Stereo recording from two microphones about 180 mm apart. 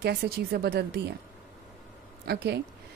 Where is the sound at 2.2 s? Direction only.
65° right (ahead or behind).